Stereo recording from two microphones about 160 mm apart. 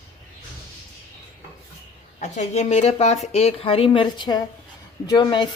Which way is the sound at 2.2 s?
45° left (ahead or behind).